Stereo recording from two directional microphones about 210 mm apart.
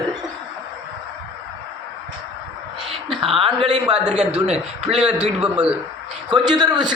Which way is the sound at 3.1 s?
25° right (ahead or behind).